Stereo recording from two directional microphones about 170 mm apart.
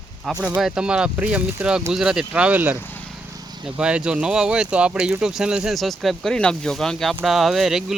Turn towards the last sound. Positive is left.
turn(degrees=0)  # may be behind; listen again after turning